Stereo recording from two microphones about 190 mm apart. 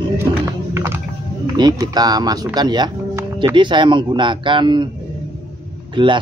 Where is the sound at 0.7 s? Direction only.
15° right (ahead or behind).